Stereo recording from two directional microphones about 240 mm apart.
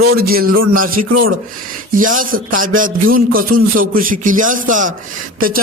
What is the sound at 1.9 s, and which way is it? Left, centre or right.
A man's voice, right.